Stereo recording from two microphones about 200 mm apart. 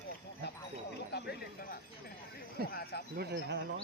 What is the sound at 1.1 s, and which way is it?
Speech, 55° left (ahead or behind).